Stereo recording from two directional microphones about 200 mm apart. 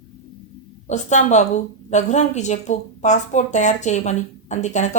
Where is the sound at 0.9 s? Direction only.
35° left (ahead or behind).